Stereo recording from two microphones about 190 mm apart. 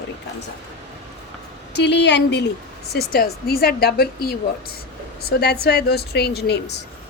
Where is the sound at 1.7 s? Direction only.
65° left (ahead or behind).